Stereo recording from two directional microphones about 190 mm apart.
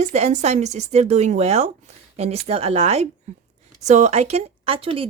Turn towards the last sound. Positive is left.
turn(degrees=-30)  # may be behind; listen again after turning